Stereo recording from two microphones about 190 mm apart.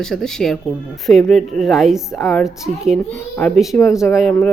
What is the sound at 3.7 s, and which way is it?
Speech, 10° left (ahead or behind).